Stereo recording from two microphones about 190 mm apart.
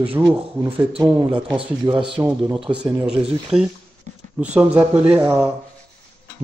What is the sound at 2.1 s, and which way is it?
Speech, 5° right (ahead or behind).